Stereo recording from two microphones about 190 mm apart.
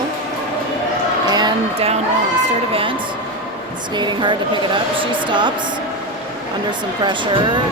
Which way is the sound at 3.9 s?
25° right (ahead or behind).